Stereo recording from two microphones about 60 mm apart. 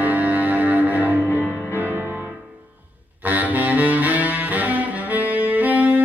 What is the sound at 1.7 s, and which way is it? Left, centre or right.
Music, right.